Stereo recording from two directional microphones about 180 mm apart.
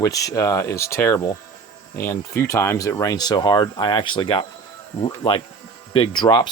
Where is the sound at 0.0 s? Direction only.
20° left (ahead or behind).